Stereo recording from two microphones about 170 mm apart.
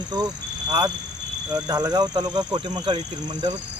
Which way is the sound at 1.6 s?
20° right (ahead or behind).